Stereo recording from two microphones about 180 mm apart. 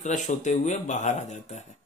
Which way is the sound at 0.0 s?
40° left (ahead or behind).